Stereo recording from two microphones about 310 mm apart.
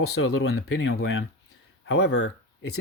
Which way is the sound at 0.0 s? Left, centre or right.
Left.